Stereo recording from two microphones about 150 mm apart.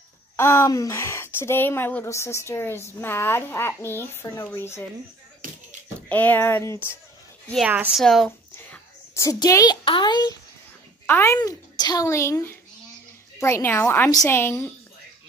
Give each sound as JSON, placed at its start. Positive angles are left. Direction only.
{"t": 0.4, "sound": "speech", "side_deg": 20}
{"t": 5.4, "sound": "a sound", "side_deg": -65}
{"t": 5.9, "sound": "speech", "side_deg": 10}
{"t": 7.6, "sound": "a woman's voice", "side_deg": -10}
{"t": 9.1, "sound": "a child's voice", "side_deg": 20}
{"t": 11.1, "sound": "a child's voice", "side_deg": 15}
{"t": 11.3, "sound": "a child's voice", "side_deg": 25}